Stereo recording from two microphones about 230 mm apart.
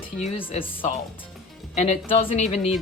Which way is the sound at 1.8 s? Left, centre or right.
Left.